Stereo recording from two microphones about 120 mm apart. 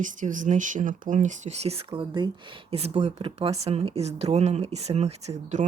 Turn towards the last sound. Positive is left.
turn(degrees=-75)  # may be behind; listen again after turning